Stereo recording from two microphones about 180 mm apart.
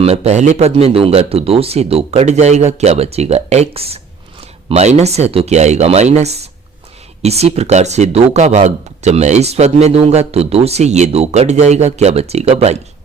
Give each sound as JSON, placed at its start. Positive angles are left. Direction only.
{"t": 0.0, "sound": "speech", "side_deg": -35}